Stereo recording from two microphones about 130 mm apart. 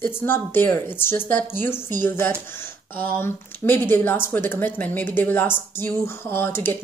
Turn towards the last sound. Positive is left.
turn(degrees=15)  # may be behind; listen again after turning